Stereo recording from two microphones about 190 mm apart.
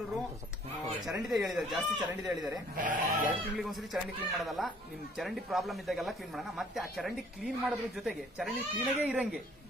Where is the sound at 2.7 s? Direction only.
45° right (ahead or behind).